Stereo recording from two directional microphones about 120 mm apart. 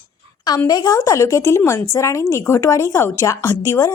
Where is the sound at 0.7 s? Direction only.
30° left (ahead or behind).